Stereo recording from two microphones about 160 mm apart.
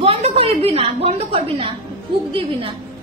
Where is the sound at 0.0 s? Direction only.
40° right (ahead or behind).